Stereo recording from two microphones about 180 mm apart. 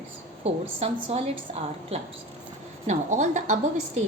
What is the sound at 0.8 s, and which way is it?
A woman's voice, 35° right (ahead or behind).